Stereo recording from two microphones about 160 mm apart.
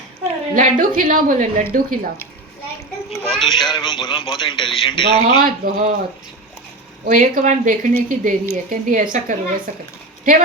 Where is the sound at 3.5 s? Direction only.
30° left (ahead or behind).